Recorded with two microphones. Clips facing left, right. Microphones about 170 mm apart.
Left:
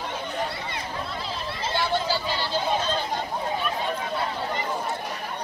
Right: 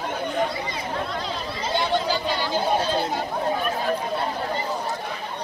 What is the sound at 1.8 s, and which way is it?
Chatter, 15° right (ahead or behind).